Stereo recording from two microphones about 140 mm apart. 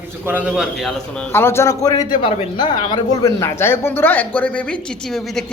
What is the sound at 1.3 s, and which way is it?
Speech, 15° left (ahead or behind).